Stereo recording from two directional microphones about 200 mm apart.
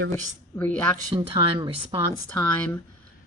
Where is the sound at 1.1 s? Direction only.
25° right (ahead or behind).